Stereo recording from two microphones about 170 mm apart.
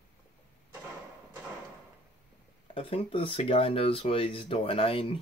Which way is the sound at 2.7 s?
35° left (ahead or behind).